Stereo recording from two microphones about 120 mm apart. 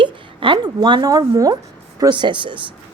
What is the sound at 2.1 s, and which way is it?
Speech, 40° right (ahead or behind).